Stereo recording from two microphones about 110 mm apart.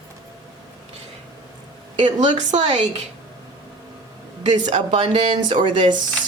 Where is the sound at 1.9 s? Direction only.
90° right.